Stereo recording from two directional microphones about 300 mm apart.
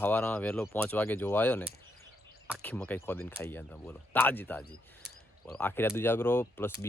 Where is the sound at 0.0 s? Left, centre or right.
Centre.